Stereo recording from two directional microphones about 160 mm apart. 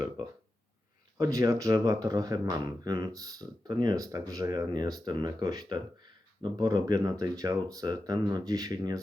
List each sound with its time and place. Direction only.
1.2 s speech: 20° right (ahead or behind)